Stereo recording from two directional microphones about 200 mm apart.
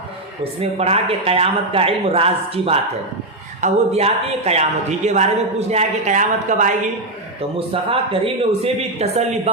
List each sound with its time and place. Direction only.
0.6 s a man's voice: 30° right (ahead or behind)
7.7 s a man's voice: 25° right (ahead or behind)